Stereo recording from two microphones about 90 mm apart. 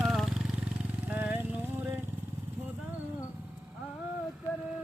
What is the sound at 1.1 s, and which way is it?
Vehicle, 20° right (ahead or behind).